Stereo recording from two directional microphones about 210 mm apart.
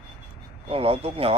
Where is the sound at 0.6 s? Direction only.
25° right (ahead or behind).